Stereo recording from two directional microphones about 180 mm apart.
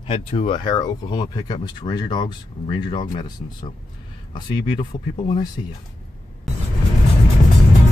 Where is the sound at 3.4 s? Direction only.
40° left (ahead or behind).